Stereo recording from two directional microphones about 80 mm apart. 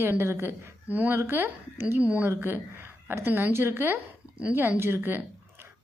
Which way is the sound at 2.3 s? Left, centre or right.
Right.